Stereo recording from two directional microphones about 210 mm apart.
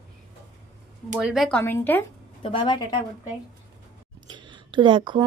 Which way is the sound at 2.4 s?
25° left (ahead or behind).